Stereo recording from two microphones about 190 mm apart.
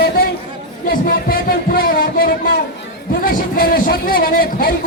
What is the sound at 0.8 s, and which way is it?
A man's voice, 50° left (ahead or behind).